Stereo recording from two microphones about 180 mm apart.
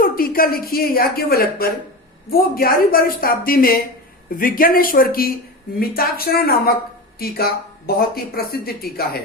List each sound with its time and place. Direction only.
0.0 s a woman's voice: 55° left (ahead or behind)